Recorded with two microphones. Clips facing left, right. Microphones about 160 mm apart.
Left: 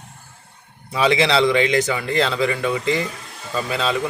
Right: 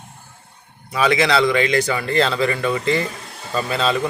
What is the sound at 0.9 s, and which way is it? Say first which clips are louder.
Speech: even; 25° left (ahead or behind).